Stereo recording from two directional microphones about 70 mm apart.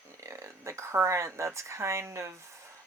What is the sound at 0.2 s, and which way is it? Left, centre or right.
Speech, right.